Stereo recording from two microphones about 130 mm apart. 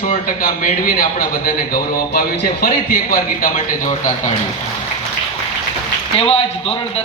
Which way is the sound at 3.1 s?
90° left.